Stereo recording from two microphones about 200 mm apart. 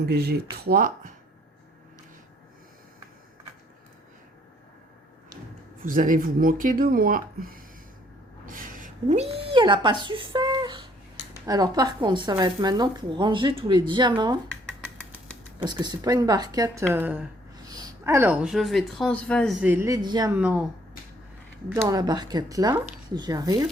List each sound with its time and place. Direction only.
0.0 s speech: 50° right (ahead or behind)
5.8 s speech: 40° right (ahead or behind); by 14.3 s 20° right (ahead or behind)
15.6 s speech: 20° right (ahead or behind); by 19.5 s 5° left (ahead or behind)
19.6 s speech: 10° right (ahead or behind)
20.3 s speech: 5° right (ahead or behind)
21.8 s speech: 20° right (ahead or behind)